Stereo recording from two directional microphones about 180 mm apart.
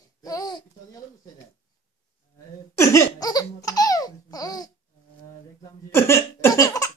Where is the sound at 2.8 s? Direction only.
15° left (ahead or behind).